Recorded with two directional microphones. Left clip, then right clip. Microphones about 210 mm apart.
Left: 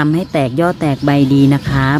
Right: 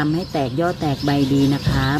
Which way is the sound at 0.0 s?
45° left (ahead or behind).